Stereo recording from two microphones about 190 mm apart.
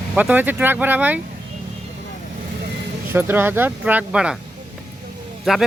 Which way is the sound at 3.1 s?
10° right (ahead or behind).